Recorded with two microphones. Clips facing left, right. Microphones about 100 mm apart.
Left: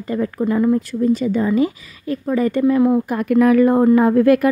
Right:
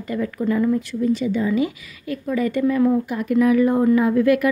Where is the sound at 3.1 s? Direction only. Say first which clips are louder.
Left 3 dB; 55° left (ahead or behind).